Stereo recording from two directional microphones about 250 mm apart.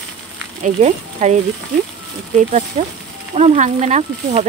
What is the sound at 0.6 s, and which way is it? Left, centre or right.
Speech, right.